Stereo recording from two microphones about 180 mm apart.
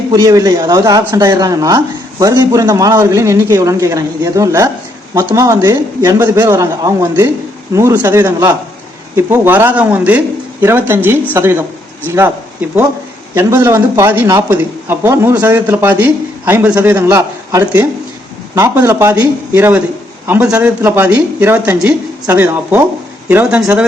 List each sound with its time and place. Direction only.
0.2 s speech: 20° right (ahead or behind)
13.3 s speech: 10° right (ahead or behind)